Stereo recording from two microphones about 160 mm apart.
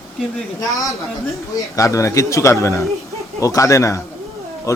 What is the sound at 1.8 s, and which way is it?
Speech, 20° left (ahead or behind).